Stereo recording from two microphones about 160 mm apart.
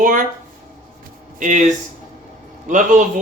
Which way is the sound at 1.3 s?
50° right (ahead or behind).